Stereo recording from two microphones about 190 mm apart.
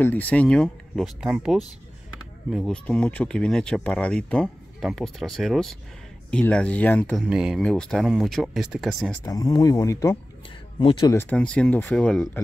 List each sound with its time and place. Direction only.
0.0 s speech: 10° left (ahead or behind)
9.2 s speech: 20° left (ahead or behind)
11.1 s speech: 5° left (ahead or behind)